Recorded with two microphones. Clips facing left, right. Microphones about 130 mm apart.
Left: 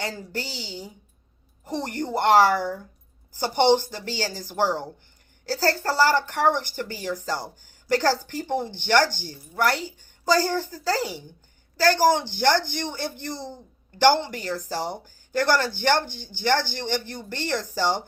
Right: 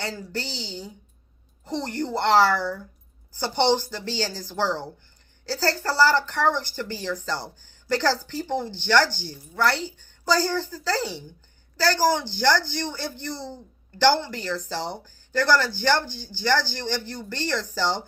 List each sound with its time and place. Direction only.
0.0 s speech: 15° left (ahead or behind)